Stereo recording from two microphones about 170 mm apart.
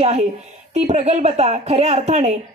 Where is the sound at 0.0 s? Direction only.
40° right (ahead or behind).